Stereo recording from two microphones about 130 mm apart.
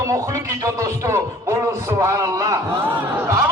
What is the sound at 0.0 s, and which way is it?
Music, 25° right (ahead or behind).